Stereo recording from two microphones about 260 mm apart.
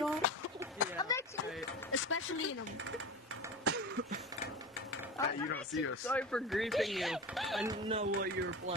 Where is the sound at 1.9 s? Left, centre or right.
Left.